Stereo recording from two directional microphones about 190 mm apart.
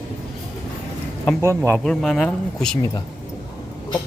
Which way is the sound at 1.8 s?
Centre (ahead or behind).